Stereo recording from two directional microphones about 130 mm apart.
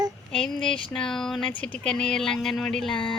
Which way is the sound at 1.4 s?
5° left (ahead or behind).